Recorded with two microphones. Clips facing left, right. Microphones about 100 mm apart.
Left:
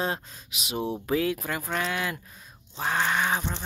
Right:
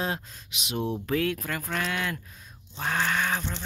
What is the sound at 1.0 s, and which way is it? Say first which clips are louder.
Speech: left 1 dB; 5° left (ahead or behind).